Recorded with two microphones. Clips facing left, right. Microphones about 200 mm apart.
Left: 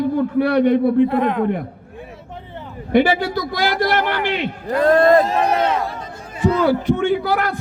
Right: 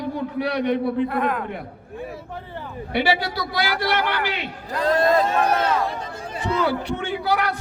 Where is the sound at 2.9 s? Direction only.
45° left (ahead or behind).